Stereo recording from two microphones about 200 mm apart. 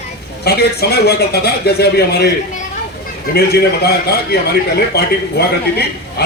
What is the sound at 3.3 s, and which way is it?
A man's voice, 55° left (ahead or behind).